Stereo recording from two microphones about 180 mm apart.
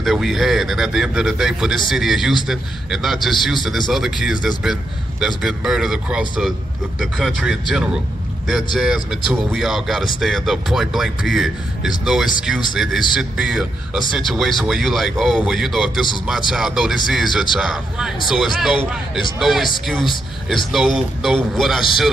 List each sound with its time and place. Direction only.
0.0 s speech: centre (ahead or behind)